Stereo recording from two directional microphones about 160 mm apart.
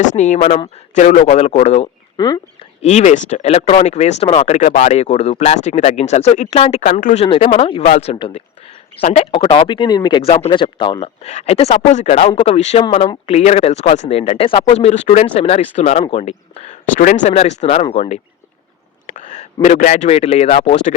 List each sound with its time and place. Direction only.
0.2 s speech: 50° left (ahead or behind)
2.1 s speech: 25° left (ahead or behind)
2.8 s speech: 45° left (ahead or behind)
9.3 s speech: 30° left (ahead or behind); by 17.3 s 55° left (ahead or behind)
17.3 s speech: 40° left (ahead or behind)
19.1 s a sound: 50° left (ahead or behind)
19.6 s speech: 50° left (ahead or behind)